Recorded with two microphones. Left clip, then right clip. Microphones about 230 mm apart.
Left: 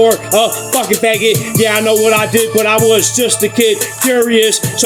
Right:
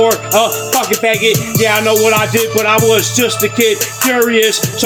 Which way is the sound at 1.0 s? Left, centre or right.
Centre.